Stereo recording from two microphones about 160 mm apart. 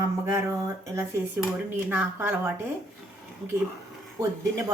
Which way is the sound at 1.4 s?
5° right (ahead or behind).